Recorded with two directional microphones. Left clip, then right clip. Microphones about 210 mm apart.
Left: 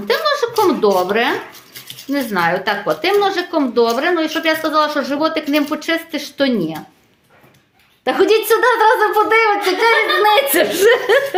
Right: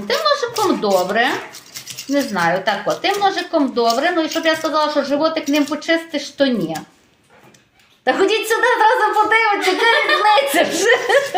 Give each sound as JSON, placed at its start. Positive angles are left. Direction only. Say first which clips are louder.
{"t": 0.1, "sound": "a sound", "louder": "left 1 dB", "side_deg": 35}
{"t": 2.1, "sound": "a woman's voice", "louder": "even", "side_deg": 35}
{"t": 8.0, "sound": "a woman's voice", "louder": "left 2 dB", "side_deg": 30}